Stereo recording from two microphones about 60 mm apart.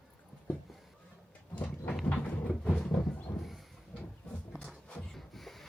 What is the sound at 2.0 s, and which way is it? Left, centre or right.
Train, left.